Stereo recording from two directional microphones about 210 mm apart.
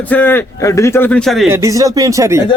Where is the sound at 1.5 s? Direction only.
15° right (ahead or behind).